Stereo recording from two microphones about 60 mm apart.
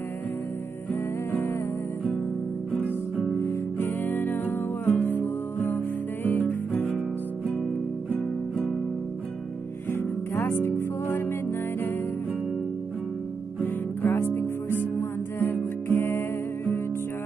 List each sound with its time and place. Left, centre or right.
3.3 s music: left
9.8 s music: left
14.0 s music: left